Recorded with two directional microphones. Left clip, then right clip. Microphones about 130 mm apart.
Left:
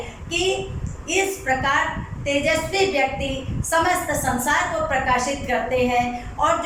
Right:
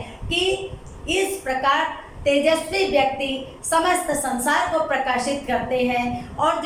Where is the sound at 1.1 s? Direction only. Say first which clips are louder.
Left 1 dB; 10° right (ahead or behind).